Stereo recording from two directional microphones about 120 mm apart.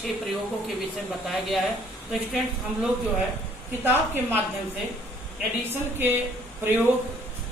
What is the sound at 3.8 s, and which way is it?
Speech, 15° right (ahead or behind).